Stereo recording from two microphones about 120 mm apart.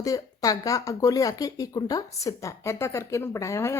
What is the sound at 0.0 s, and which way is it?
Speech, 30° left (ahead or behind).